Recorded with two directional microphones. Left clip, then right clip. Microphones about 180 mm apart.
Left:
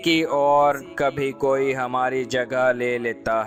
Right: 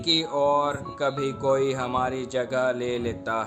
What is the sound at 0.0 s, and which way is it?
Speech, 50° left (ahead or behind).